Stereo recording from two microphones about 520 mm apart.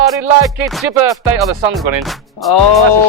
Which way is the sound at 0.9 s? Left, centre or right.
Right.